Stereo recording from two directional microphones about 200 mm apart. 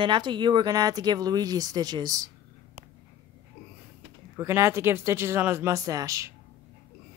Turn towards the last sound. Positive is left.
turn(degrees=-15)  # may be behind; listen again after turning